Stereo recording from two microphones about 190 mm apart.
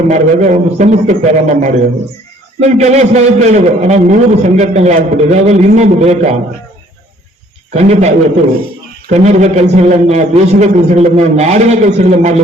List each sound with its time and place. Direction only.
0.1 s a man's voice: 40° right (ahead or behind)
7.7 s a man's voice: 35° right (ahead or behind)